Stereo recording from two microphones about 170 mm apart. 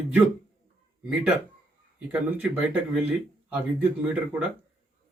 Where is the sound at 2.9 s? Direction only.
5° right (ahead or behind).